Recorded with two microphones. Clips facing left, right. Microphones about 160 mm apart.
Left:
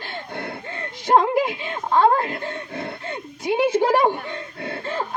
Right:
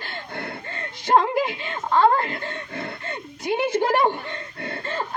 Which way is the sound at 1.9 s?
15° left (ahead or behind).